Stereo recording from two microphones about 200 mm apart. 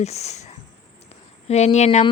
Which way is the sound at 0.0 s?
35° left (ahead or behind).